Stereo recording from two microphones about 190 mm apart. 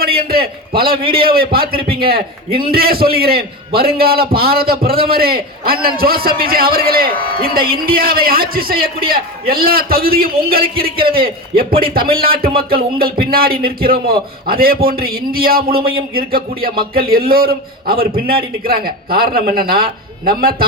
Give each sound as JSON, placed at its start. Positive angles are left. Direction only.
{"t": 0.0, "sound": "a man's voice", "side_deg": -55}
{"t": 2.5, "sound": "a man's voice", "side_deg": -30}
{"t": 2.7, "sound": "a man's voice", "side_deg": -50}